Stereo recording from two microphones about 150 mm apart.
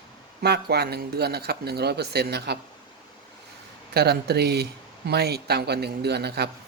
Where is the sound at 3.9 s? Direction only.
90° right.